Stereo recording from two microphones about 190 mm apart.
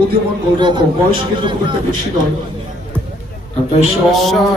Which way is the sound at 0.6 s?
25° right (ahead or behind).